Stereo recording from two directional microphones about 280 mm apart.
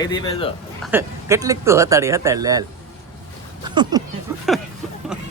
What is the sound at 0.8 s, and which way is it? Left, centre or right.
Speech, centre.